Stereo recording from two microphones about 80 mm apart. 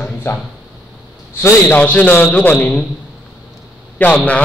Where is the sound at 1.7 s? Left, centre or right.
Centre.